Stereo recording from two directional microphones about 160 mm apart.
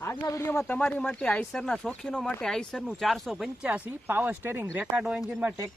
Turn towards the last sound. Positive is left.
turn(degrees=-15)  # may be behind; listen again after turning